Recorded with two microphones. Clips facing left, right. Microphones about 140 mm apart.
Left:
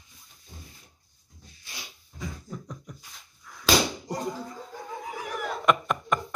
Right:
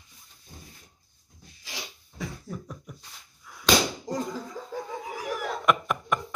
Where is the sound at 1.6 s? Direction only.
90° right.